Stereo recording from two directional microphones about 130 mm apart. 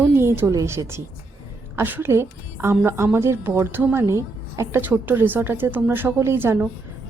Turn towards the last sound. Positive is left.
turn(degrees=-15)  # may be behind; listen again after turning